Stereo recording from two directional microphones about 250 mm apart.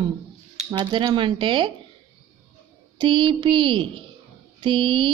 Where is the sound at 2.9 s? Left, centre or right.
Centre.